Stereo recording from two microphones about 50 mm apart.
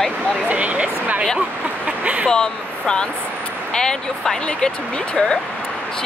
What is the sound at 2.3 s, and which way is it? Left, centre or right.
Speech, centre.